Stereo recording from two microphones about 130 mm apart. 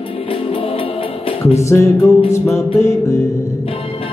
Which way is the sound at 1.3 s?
50° left (ahead or behind).